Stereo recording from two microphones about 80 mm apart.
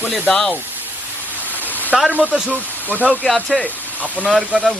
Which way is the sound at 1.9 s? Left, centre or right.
Centre.